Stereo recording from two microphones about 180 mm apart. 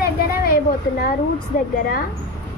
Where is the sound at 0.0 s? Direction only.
55° left (ahead or behind).